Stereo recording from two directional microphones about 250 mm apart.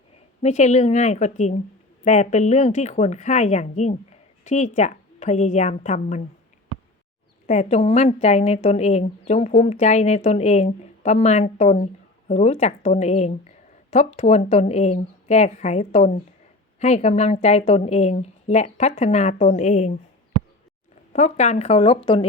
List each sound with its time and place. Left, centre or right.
0.4 s a woman's voice: left
7.4 s a woman's voice: left
21.1 s a woman's voice: left